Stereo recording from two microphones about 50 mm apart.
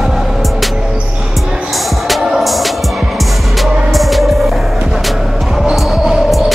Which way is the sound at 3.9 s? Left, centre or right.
Centre.